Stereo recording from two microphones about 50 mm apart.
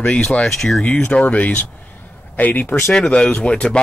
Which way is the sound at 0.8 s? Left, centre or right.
Left.